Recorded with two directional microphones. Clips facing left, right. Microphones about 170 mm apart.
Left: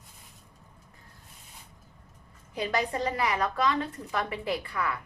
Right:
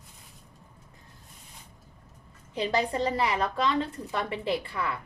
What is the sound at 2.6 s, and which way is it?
A woman's voice, 30° right (ahead or behind).